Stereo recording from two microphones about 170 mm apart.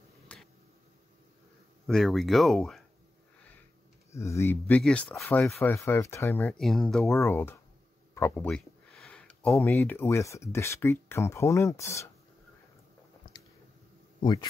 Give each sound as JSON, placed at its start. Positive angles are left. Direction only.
{"t": 0.3, "sound": "a sound", "side_deg": 5}
{"t": 1.9, "sound": "speech", "side_deg": 0}
{"t": 4.1, "sound": "speech", "side_deg": 15}
{"t": 6.4, "sound": "speech", "side_deg": 0}